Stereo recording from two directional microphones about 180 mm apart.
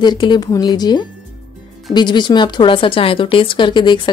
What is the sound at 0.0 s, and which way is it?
Speech, 25° left (ahead or behind).